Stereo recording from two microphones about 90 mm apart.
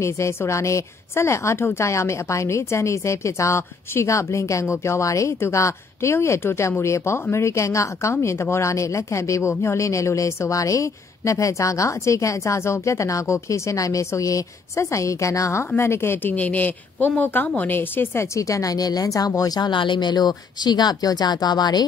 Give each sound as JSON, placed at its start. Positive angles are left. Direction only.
{"t": 0.0, "sound": "a woman's voice", "side_deg": 30}